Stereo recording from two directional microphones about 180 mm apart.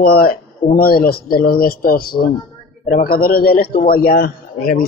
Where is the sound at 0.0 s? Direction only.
55° left (ahead or behind).